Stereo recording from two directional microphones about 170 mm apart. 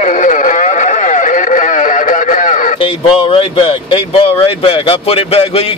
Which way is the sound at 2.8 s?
30° left (ahead or behind).